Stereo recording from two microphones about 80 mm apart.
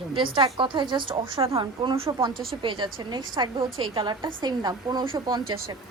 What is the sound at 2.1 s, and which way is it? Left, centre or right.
Speech, right.